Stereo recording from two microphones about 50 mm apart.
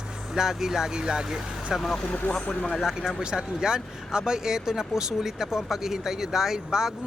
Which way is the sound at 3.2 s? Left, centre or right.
Centre.